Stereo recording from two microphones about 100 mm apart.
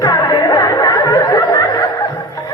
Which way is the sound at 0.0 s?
40° left (ahead or behind).